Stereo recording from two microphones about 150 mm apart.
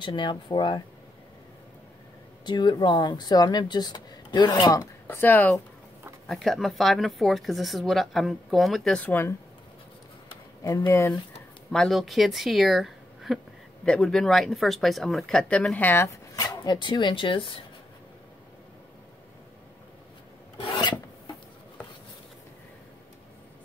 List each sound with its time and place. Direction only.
0.0 s speech: 30° left (ahead or behind)
2.4 s speech: 30° left (ahead or behind)
5.0 s speech: 15° left (ahead or behind)
10.6 s speech: 25° left (ahead or behind)
11.7 s speech: centre (ahead or behind); by 17.5 s 35° left (ahead or behind)
20.6 s filing: 30° left (ahead or behind)